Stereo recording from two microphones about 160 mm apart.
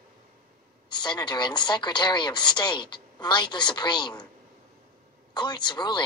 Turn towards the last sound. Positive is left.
turn(degrees=25)  # may be behind; listen again after turning